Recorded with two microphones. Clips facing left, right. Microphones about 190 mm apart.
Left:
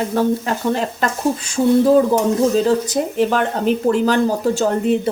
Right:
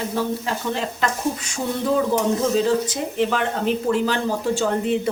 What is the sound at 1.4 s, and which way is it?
Speech, 35° left (ahead or behind).